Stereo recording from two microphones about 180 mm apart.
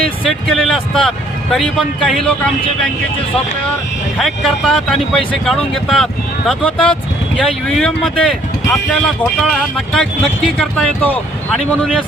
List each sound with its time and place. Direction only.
0.3 s speech: centre (ahead or behind)
4.2 s speech: centre (ahead or behind)
7.3 s speech: centre (ahead or behind)